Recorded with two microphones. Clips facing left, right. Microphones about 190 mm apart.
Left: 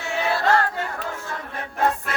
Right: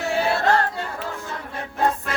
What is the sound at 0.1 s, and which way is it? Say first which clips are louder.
Choir: right 1 dB; 30° right (ahead or behind).